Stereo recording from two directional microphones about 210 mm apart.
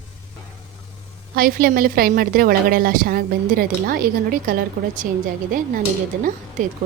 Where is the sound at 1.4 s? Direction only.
45° right (ahead or behind).